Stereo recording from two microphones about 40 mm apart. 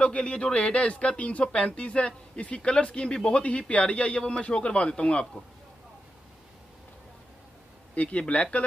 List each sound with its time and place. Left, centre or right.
0.0 s speech: left
3.4 s a man's voice: left
7.9 s a man's voice: left